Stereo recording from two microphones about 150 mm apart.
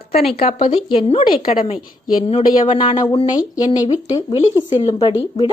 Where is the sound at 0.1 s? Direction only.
40° left (ahead or behind); by 4.4 s 25° left (ahead or behind).